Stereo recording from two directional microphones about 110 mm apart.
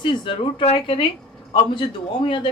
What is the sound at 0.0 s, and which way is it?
Speech, 45° left (ahead or behind).